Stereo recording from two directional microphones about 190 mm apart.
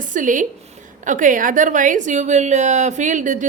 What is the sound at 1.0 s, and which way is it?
A woman's voice, 45° right (ahead or behind).